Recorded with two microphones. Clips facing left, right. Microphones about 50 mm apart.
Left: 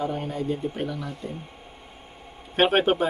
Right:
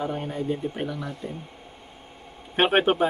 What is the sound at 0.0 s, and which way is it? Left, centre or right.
A man's voice, centre.